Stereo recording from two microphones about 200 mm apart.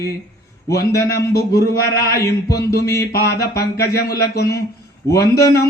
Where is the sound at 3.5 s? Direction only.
50° left (ahead or behind).